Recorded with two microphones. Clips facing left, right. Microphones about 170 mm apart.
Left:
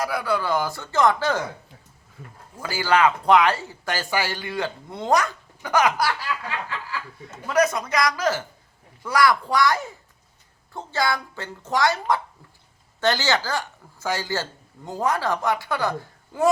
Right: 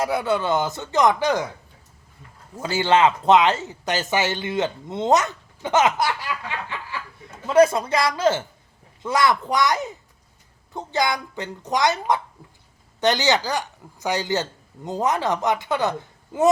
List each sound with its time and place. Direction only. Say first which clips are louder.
0.0 s speech: right 3 dB; 25° right (ahead or behind)
2.6 s a woman's voice: right 2 dB; 25° right (ahead or behind)